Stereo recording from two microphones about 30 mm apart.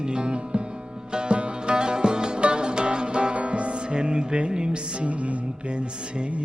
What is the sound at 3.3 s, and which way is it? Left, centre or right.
Music, right.